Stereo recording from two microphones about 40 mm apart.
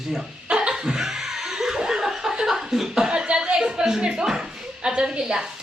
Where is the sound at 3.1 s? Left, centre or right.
Right.